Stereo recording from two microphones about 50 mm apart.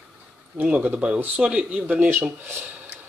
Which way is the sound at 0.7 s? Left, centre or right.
Right.